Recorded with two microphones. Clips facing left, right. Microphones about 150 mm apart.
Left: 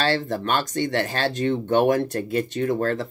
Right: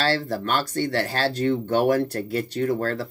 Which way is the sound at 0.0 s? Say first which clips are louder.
Left 1 dB; 20° left (ahead or behind).